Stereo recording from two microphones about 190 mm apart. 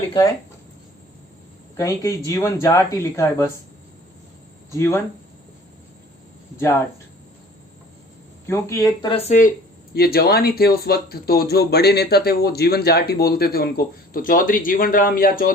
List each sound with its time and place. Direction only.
1.7 s speech: 15° left (ahead or behind)
4.7 s speech: 15° left (ahead or behind)
8.4 s speech: 15° left (ahead or behind); by 9.5 s 35° left (ahead or behind)
9.9 s speech: 55° left (ahead or behind)